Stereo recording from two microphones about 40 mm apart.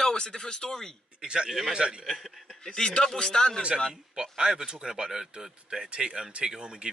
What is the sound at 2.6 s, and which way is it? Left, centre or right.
Speech, centre.